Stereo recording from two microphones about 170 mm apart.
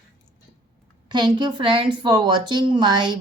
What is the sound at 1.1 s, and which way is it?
A woman's voice, 25° right (ahead or behind).